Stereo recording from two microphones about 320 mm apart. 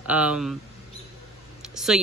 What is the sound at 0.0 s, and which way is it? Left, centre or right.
Speech, centre.